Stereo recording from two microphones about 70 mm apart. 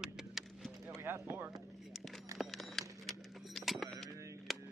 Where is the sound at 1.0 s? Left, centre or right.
Right.